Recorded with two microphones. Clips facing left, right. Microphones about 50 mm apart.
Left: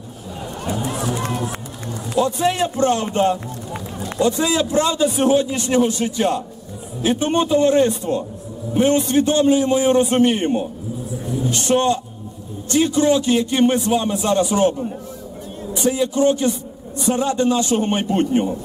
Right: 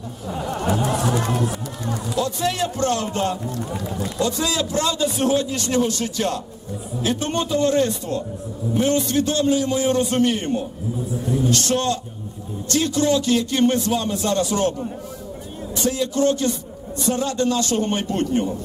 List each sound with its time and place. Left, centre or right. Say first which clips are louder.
0.6 s speech: right 2 dB; right
2.1 s a man's voice: left 5 dB; left